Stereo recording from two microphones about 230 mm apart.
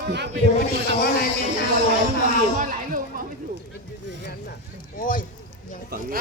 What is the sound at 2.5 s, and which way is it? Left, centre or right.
Speech, right.